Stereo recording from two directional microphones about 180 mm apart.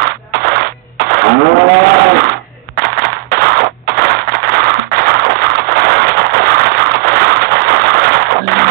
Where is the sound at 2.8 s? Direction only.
60° right (ahead or behind).